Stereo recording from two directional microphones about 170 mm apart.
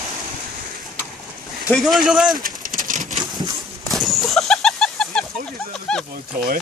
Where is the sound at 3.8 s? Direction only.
Centre (ahead or behind).